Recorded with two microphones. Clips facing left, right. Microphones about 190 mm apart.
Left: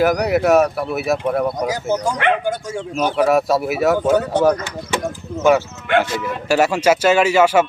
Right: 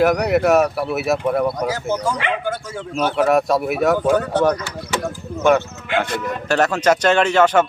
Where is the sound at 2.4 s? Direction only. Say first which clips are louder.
Left 3 dB; 15° left (ahead or behind).